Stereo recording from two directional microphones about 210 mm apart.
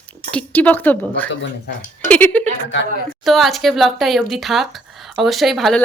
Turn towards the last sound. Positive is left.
turn(degrees=0)  # may be behind; listen again after turning